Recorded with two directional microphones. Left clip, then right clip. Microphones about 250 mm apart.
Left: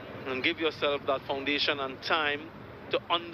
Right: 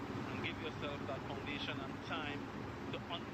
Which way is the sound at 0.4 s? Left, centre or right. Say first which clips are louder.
Left 19 dB; left.